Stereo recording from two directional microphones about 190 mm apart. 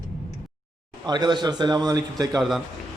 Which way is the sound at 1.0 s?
20° right (ahead or behind).